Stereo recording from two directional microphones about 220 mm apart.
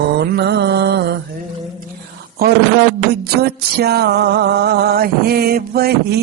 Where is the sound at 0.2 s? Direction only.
50° right (ahead or behind).